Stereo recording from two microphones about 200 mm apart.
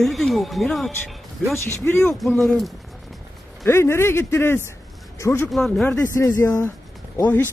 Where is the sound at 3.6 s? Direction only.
10° left (ahead or behind).